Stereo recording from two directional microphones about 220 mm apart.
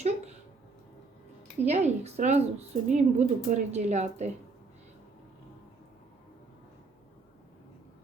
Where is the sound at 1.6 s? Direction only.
30° right (ahead or behind).